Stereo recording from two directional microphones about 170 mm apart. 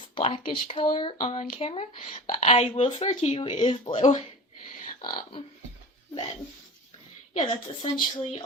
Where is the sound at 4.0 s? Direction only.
45° left (ahead or behind).